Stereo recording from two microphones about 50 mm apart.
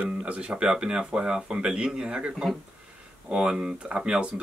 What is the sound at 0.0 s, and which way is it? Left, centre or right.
Speech, right.